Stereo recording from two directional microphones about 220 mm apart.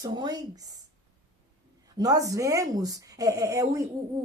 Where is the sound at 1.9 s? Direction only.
15° right (ahead or behind).